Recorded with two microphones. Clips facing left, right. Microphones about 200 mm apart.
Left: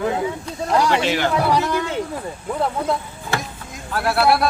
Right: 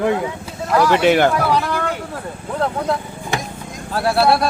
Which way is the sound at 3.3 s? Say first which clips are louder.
Right 1 dB; 15° right (ahead or behind).